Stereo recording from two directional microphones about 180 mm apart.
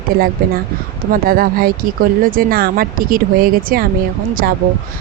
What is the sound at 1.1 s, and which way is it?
Speech, 55° right (ahead or behind).